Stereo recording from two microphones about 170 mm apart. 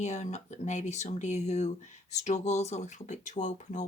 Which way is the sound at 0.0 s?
45° left (ahead or behind).